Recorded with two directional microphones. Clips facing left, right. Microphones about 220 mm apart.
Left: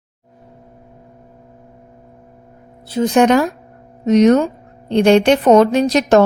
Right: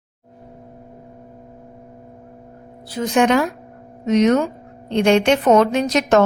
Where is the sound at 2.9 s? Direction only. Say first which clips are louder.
Left 4 dB; 35° left (ahead or behind).